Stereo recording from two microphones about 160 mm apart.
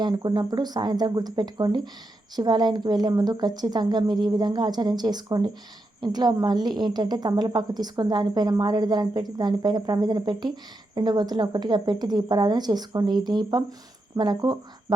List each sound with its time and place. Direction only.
0.0 s a woman's voice: 25° right (ahead or behind)